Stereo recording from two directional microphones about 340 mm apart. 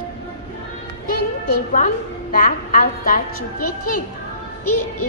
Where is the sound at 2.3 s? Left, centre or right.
Left.